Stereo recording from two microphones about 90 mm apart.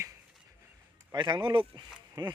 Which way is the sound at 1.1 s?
55° right (ahead or behind).